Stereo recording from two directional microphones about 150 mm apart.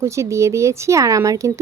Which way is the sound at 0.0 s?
20° right (ahead or behind).